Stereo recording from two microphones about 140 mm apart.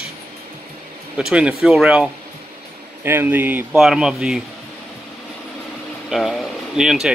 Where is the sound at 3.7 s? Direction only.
5° right (ahead or behind).